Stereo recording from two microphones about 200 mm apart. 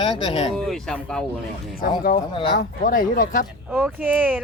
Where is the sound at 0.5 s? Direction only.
Centre (ahead or behind).